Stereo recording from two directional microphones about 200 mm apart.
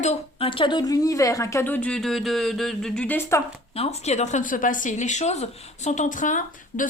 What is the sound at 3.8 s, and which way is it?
A woman's voice, 30° left (ahead or behind).